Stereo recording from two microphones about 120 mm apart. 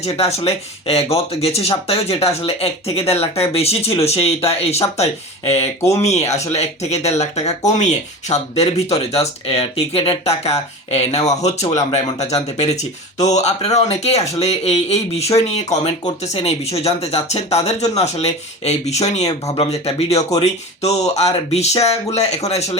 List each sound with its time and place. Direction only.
0.0 s speech: 60° left (ahead or behind)